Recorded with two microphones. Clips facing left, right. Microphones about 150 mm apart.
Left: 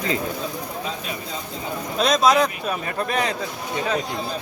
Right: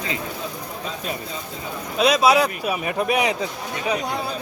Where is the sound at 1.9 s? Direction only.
10° right (ahead or behind).